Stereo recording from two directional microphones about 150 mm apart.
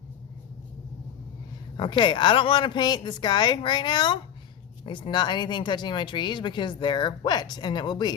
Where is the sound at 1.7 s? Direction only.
30° left (ahead or behind).